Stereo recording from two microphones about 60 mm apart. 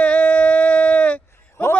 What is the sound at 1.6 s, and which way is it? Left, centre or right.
Speech, left.